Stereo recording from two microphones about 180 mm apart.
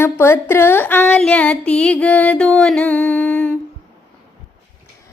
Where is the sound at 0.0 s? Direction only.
15° left (ahead or behind).